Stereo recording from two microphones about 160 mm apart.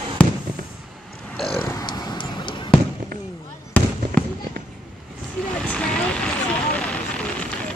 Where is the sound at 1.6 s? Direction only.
25° left (ahead or behind).